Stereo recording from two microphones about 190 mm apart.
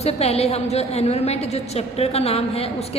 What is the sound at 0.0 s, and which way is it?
A woman's voice, 35° left (ahead or behind).